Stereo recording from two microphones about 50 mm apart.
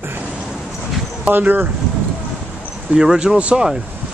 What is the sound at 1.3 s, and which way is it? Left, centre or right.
Speech, right.